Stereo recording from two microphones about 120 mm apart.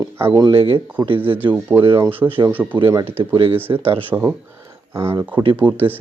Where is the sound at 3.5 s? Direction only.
15° right (ahead or behind).